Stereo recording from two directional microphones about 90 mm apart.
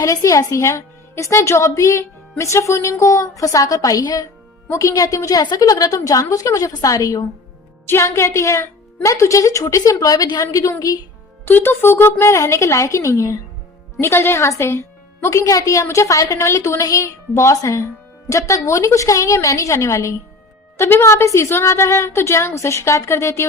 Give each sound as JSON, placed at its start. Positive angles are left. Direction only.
{"t": 0.0, "sound": "a woman's voice", "side_deg": 35}
{"t": 11.4, "sound": "a woman's voice", "side_deg": 25}